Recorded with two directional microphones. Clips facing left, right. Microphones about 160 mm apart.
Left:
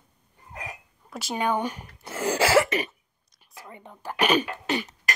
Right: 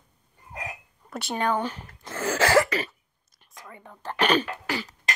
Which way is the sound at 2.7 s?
20° left (ahead or behind).